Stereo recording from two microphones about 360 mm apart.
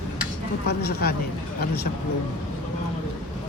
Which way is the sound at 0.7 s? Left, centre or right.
Left.